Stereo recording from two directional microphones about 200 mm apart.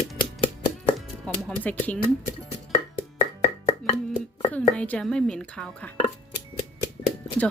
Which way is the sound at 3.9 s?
30° left (ahead or behind).